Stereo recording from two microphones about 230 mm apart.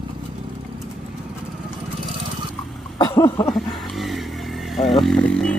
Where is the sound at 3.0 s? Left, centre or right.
Centre.